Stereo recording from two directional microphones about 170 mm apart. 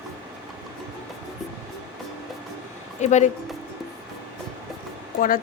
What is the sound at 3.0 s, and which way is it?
Speech, 45° left (ahead or behind).